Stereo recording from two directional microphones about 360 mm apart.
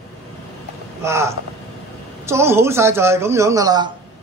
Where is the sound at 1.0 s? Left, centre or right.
Centre.